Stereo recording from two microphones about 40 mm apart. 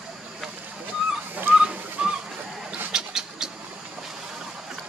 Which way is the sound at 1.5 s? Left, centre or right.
Right.